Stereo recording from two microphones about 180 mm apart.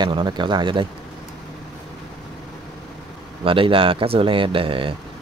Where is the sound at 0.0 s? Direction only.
25° right (ahead or behind).